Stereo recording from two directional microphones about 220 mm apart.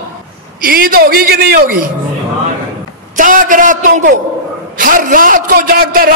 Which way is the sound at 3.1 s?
35° right (ahead or behind).